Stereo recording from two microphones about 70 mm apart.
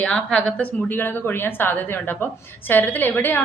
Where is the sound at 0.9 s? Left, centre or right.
Left.